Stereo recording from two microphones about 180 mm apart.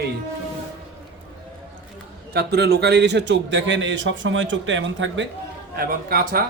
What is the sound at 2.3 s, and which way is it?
A man's voice, 60° right (ahead or behind).